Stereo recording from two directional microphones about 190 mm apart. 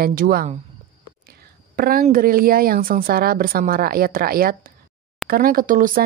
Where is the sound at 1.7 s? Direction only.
50° right (ahead or behind).